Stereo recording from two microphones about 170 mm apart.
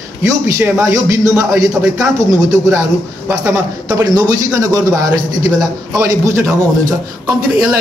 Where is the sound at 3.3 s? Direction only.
5° right (ahead or behind).